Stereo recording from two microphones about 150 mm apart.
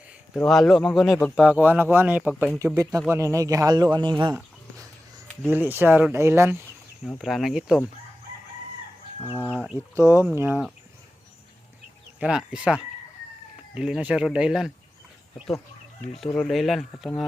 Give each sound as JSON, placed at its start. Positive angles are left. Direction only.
{"t": 0.3, "sound": "speech", "side_deg": 0}
{"t": 2.6, "sound": "speech", "side_deg": -20}
{"t": 4.4, "sound": "a sound", "side_deg": -20}
{"t": 5.5, "sound": "speech", "side_deg": -10}
{"t": 7.0, "sound": "speech", "side_deg": 0}
{"t": 9.6, "sound": "speech", "side_deg": -15}
{"t": 12.2, "sound": "speech", "side_deg": -5}
{"t": 16.1, "sound": "speech", "side_deg": 0}